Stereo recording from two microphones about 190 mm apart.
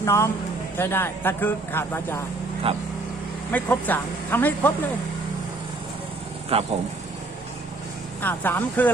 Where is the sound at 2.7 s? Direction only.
30° right (ahead or behind).